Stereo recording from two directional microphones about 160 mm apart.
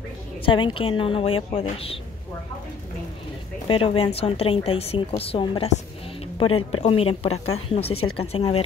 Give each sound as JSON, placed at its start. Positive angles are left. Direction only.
{"t": 0.5, "sound": "a woman's voice", "side_deg": 30}
{"t": 3.6, "sound": "a woman's voice", "side_deg": 35}